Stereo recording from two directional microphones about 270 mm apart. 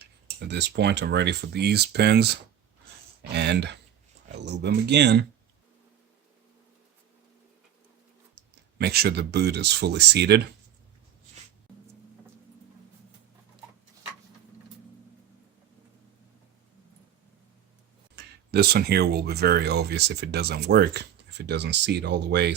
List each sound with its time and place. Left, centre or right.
0.3 s speech: right
8.8 s speech: right
18.2 s speech: right